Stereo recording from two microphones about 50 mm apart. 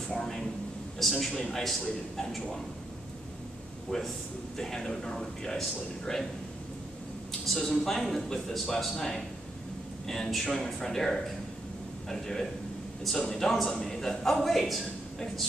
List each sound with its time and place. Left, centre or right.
0.1 s speech: centre
3.9 s speech: centre
7.4 s speech: centre